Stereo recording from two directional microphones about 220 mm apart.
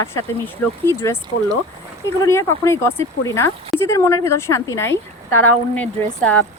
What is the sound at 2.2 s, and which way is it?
Speech, 15° left (ahead or behind).